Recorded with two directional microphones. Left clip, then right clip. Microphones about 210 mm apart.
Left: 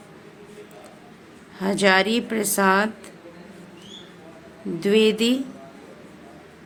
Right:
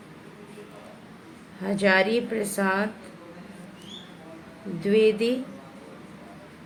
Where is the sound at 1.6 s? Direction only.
55° left (ahead or behind).